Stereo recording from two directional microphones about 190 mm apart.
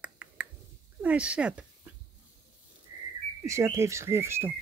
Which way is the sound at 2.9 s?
20° right (ahead or behind).